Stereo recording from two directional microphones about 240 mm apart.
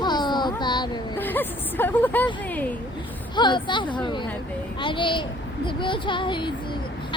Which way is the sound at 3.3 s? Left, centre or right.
Centre.